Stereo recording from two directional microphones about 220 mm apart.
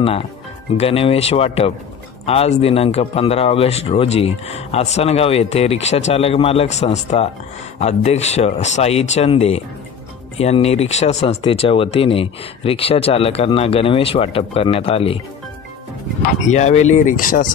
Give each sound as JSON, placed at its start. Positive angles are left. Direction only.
{"t": 0.7, "sound": "speech", "side_deg": 25}
{"t": 16.4, "sound": "speech", "side_deg": 30}